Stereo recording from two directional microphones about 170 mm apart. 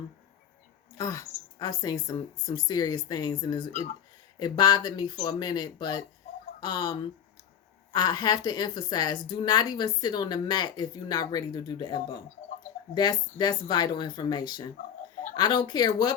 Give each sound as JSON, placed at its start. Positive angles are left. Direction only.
{"t": 0.9, "sound": "a woman's voice", "side_deg": 20}
{"t": 3.7, "sound": "speech", "side_deg": 45}
{"t": 4.4, "sound": "a woman's voice", "side_deg": 25}